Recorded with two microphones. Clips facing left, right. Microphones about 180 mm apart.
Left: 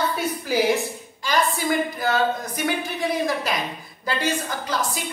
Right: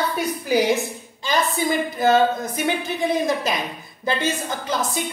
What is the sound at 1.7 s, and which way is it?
Speech, 25° right (ahead or behind).